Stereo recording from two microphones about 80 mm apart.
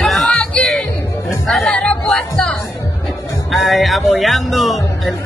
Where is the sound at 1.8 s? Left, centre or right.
Centre.